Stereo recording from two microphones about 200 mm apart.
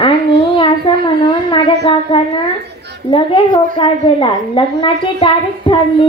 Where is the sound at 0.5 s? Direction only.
25° left (ahead or behind).